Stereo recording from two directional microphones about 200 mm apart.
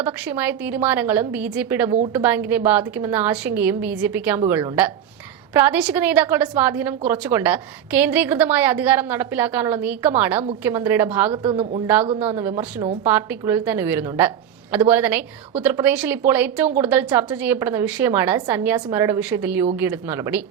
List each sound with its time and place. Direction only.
0.0 s a woman's voice: 10° right (ahead or behind)
11.3 s speech: 30° right (ahead or behind)
12.2 s a woman's voice: 10° right (ahead or behind)